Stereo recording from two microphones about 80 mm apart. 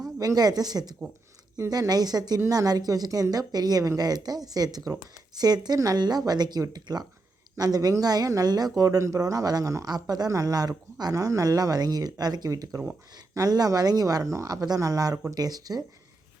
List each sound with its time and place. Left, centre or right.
0.2 s speech: right
9.9 s speech: right